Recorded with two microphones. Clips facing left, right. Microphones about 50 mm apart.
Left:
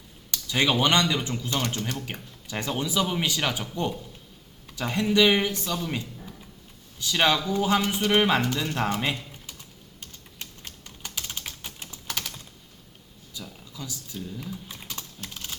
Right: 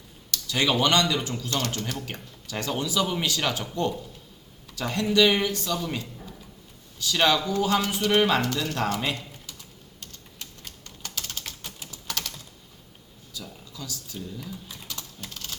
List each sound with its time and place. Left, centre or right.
0.3 s a man's voice: centre
7.0 s a man's voice: centre
10.6 s typing: centre
13.3 s a sound: left
13.7 s typing: centre
15.2 s typing: centre